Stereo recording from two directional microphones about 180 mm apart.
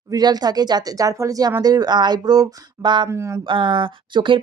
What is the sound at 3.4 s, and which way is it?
Speech, 30° right (ahead or behind).